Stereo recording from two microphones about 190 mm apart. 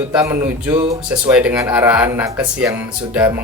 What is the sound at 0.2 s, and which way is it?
Speech, 15° right (ahead or behind).